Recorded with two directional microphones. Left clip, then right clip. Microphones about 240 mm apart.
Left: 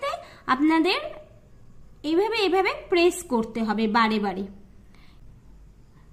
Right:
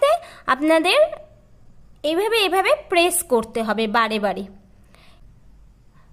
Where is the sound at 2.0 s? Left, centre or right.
Right.